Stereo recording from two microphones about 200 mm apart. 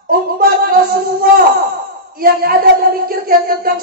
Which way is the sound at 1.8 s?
45° right (ahead or behind).